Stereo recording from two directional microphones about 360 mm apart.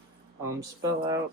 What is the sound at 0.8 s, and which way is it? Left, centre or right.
Speech, centre.